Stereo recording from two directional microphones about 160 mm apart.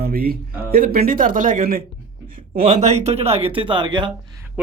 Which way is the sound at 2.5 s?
40° right (ahead or behind).